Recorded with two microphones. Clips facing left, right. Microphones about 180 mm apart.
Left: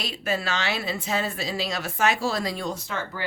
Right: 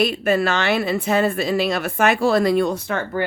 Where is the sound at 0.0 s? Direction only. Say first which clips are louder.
Right 10 dB; 55° right (ahead or behind).